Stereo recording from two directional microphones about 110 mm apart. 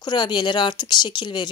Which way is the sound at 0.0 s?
45° left (ahead or behind).